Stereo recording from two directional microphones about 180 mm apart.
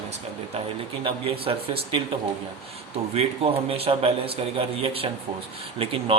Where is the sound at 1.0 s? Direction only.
30° right (ahead or behind).